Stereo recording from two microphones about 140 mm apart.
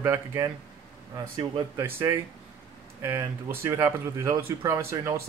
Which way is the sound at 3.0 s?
15° right (ahead or behind).